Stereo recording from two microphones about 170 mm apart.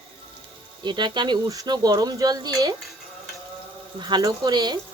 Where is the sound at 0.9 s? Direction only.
25° right (ahead or behind).